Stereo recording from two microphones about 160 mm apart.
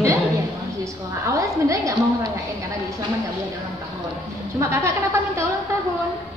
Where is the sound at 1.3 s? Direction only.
20° right (ahead or behind).